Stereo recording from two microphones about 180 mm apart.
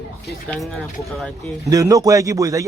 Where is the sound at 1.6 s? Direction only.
20° right (ahead or behind).